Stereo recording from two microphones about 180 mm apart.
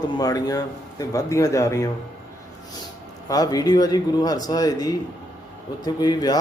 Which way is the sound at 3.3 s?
20° left (ahead or behind).